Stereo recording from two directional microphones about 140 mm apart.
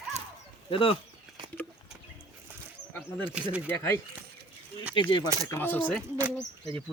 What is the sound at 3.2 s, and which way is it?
Speech, 10° right (ahead or behind).